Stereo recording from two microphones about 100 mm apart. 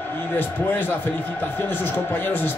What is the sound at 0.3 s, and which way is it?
A man's voice, 20° left (ahead or behind).